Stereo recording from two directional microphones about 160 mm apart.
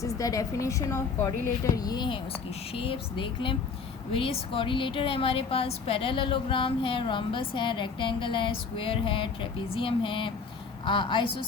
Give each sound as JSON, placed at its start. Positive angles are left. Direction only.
{"t": 0.0, "sound": "a woman's voice", "side_deg": 20}